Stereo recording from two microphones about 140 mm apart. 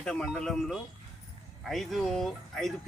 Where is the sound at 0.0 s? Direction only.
5° left (ahead or behind).